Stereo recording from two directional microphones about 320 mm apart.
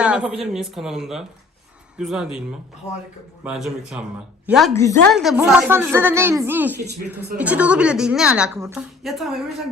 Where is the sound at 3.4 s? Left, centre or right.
Centre.